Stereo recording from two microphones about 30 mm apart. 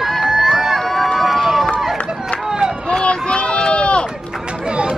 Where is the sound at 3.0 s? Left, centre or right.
Left.